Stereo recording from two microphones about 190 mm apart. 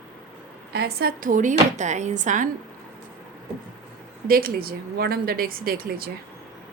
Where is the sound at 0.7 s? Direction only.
55° right (ahead or behind).